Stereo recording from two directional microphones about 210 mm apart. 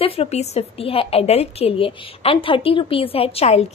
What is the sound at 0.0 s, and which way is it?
A woman's voice, 30° left (ahead or behind).